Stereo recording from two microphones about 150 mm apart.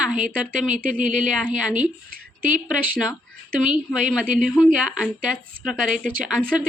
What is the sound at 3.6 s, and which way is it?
A woman's voice, 5° right (ahead or behind).